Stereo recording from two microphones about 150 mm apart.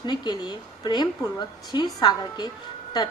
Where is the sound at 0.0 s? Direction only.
30° left (ahead or behind).